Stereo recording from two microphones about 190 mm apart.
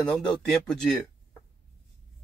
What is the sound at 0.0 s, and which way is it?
Speech, 5° left (ahead or behind).